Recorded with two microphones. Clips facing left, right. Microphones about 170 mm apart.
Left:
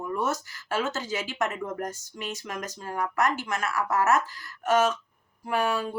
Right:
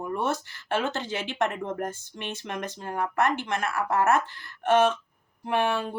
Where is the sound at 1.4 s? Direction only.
30° right (ahead or behind).